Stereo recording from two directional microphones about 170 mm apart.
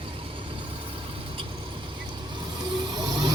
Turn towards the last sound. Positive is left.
turn(degrees=-25)  # may be behind; listen again after turning